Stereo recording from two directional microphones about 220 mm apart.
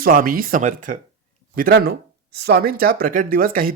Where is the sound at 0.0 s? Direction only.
40° right (ahead or behind).